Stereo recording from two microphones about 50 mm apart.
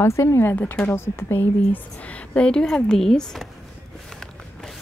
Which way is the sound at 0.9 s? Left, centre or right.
Left.